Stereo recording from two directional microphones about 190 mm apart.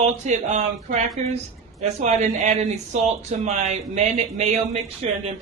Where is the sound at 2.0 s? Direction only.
40° right (ahead or behind).